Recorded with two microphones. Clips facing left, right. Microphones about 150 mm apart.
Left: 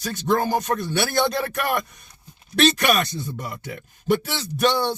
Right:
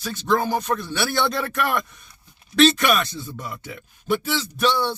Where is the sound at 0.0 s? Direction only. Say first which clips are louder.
Even; 45° left (ahead or behind).